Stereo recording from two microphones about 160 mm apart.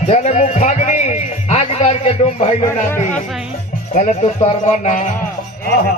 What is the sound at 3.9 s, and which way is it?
A man's voice, 45° left (ahead or behind).